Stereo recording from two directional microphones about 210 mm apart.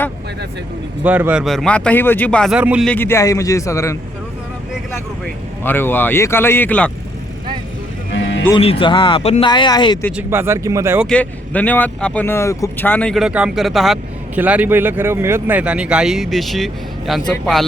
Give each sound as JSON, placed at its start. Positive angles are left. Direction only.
{"t": 1.0, "sound": "speech", "side_deg": -10}
{"t": 2.9, "sound": "a man's voice", "side_deg": 10}
{"t": 4.7, "sound": "speech", "side_deg": 0}
{"t": 8.1, "sound": "music", "side_deg": 60}
{"t": 8.5, "sound": "speech", "side_deg": 25}
{"t": 10.1, "sound": "speech", "side_deg": -10}
{"t": 11.0, "sound": "speech", "side_deg": 5}